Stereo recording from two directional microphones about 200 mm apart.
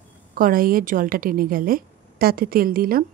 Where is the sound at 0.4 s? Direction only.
45° right (ahead or behind).